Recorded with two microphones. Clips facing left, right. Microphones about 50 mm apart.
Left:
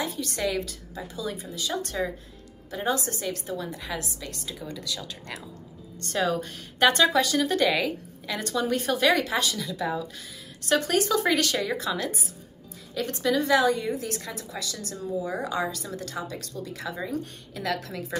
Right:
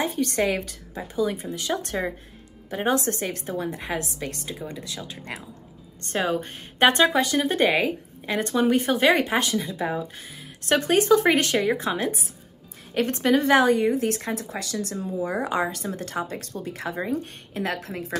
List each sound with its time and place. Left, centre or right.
0.0 s a woman's voice: right
4.6 s a woman's voice: right